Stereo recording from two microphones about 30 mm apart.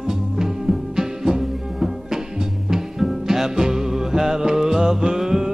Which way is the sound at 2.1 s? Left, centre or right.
Centre.